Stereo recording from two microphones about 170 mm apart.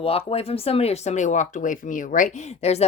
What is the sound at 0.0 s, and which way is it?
Speech, 35° left (ahead or behind).